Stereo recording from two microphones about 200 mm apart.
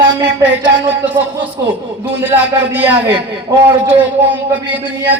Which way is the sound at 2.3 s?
10° right (ahead or behind).